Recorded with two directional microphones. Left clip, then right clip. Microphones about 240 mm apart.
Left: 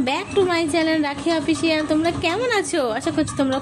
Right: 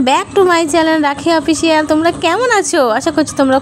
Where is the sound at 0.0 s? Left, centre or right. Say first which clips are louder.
Right 9 dB; right.